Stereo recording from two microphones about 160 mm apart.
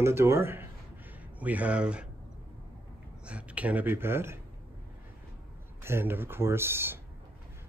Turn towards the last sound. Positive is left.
turn(degrees=-15)  # may be behind; listen again after turning